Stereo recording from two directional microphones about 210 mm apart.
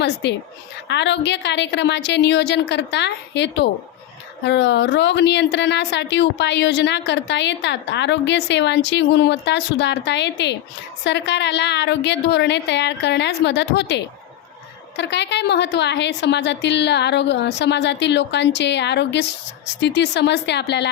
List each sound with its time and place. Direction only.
0.0 s speech: 55° left (ahead or behind)